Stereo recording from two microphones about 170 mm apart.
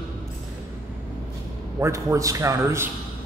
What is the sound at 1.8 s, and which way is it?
A man's voice, 15° right (ahead or behind).